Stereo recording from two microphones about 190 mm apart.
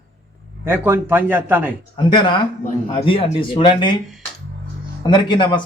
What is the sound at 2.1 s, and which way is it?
Speech, 25° left (ahead or behind).